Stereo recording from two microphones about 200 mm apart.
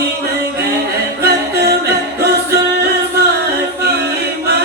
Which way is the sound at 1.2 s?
55° right (ahead or behind).